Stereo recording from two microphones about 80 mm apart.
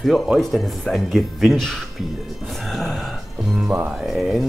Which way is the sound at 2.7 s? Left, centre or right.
Centre.